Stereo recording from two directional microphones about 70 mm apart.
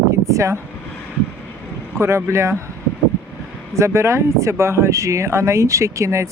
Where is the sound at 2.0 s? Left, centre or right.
Right.